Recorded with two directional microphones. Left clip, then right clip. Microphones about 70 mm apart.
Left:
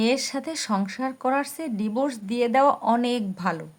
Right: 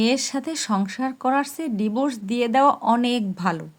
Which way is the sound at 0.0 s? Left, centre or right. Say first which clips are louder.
Right 2 dB; right.